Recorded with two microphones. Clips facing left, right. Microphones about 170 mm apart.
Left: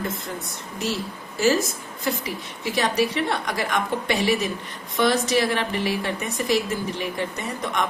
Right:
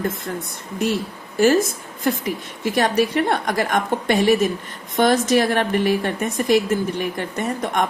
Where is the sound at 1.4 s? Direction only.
55° right (ahead or behind).